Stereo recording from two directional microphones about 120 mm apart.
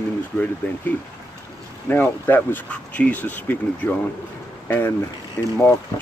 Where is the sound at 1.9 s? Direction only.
15° left (ahead or behind).